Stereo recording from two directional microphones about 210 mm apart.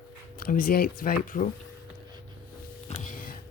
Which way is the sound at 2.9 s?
40° left (ahead or behind).